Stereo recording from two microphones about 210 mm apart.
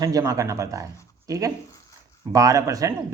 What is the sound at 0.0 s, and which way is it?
A man's voice, 15° right (ahead or behind).